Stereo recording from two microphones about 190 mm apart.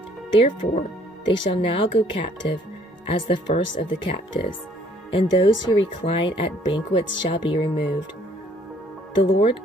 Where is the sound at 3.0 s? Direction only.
25° left (ahead or behind).